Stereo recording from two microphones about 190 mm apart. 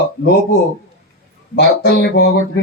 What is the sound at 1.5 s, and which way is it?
Speech, 60° left (ahead or behind).